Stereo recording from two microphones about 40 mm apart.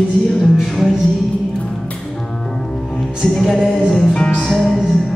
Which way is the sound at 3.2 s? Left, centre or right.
Centre.